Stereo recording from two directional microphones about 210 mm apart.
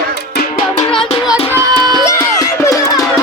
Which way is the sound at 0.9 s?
Centre (ahead or behind).